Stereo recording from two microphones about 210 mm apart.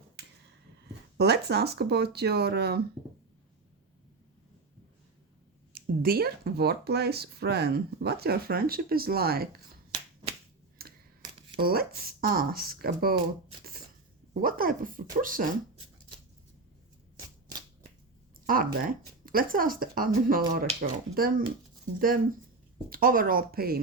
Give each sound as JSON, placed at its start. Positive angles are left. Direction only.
{"t": 0.2, "sound": "finger snapping", "side_deg": -50}
{"t": 1.2, "sound": "speech", "side_deg": -50}
{"t": 5.7, "sound": "speech", "side_deg": -45}
{"t": 10.8, "sound": "computer keyboard", "side_deg": -45}
{"t": 11.2, "sound": "shuffling cards", "side_deg": -25}
{"t": 11.6, "sound": "speech", "side_deg": -45}
{"t": 14.4, "sound": "speech", "side_deg": -40}
{"t": 18.4, "sound": "speech", "side_deg": -40}